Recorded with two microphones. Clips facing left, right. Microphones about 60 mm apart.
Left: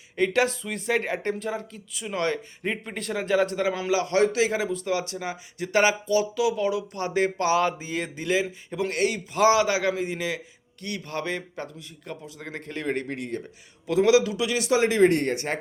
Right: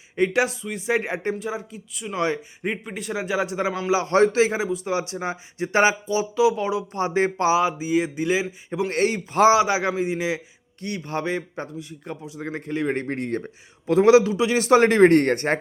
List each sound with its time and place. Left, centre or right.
0.2 s speech: centre
0.6 s speech: centre
0.9 s speech: centre
2.1 s speech: centre
3.9 s a man's voice: right
4.5 s a man's voice: centre
7.5 s speech: centre
8.9 s a man's voice: right
14.7 s speech: right